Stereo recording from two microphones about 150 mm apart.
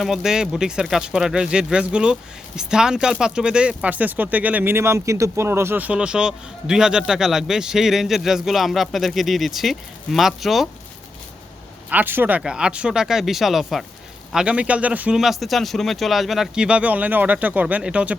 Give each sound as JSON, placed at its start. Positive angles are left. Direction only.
{"t": 0.0, "sound": "speech", "side_deg": -5}
{"t": 11.9, "sound": "speech", "side_deg": -10}